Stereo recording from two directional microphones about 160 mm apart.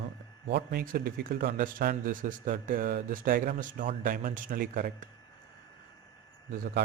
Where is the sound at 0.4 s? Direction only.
80° right; by 5.0 s 60° right (ahead or behind).